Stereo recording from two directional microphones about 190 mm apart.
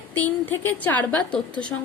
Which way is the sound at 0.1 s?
10° left (ahead or behind).